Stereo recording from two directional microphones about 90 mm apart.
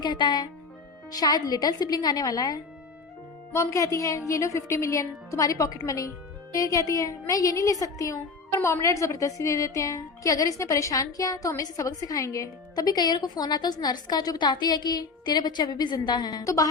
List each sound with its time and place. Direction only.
0.0 s a woman's voice: 55° left (ahead or behind)
3.5 s a woman's voice: 35° left (ahead or behind)